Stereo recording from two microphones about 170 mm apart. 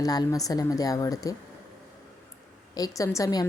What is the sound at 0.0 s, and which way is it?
Speech, 20° left (ahead or behind).